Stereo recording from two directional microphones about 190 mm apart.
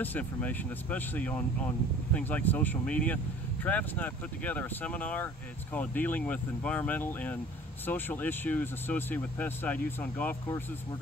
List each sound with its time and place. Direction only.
0.0 s speech: 10° left (ahead or behind)